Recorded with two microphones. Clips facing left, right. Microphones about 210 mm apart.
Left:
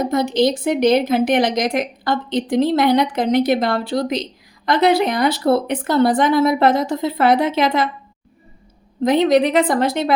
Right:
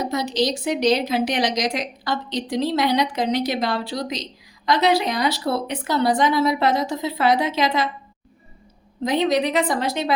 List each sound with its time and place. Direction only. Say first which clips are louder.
0.0 s a woman's voice: left 6 dB; 50° left (ahead or behind)
9.0 s a woman's voice: left 6 dB; 55° left (ahead or behind)